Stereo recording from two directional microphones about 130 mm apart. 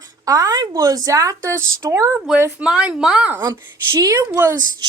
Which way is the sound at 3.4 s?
25° right (ahead or behind).